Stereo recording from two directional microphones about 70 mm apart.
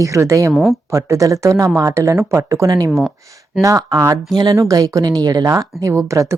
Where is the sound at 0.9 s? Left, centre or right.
Right.